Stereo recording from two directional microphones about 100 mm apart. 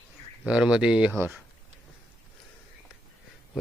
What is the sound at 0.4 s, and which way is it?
Speech, 5° right (ahead or behind).